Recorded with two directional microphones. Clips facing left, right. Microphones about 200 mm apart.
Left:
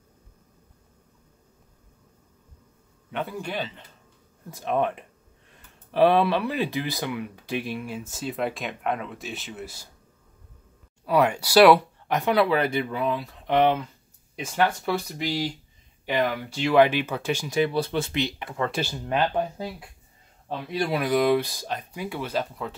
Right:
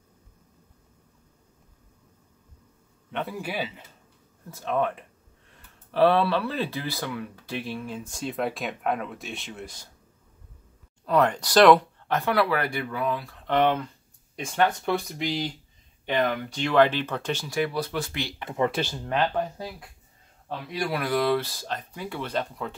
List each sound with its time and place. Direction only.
3.1 s speech: centre (ahead or behind)
4.5 s speech: 15° left (ahead or behind)
11.1 s speech: 10° left (ahead or behind)
17.6 s speech: 25° left (ahead or behind)
20.4 s speech: 25° left (ahead or behind); by 22.8 s 5° left (ahead or behind)